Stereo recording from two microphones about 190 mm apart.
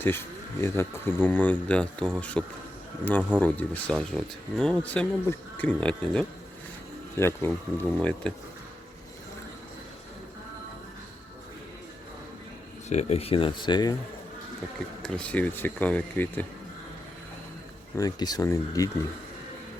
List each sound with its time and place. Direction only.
0.6 s speech: 10° left (ahead or behind)
12.9 s speech: 35° left (ahead or behind)
15.0 s speech: 5° left (ahead or behind)
17.9 s speech: 20° left (ahead or behind)